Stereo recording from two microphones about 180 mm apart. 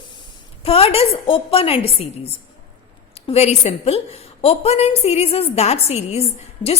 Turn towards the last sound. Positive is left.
turn(degrees=35)  # may be behind; listen again after turning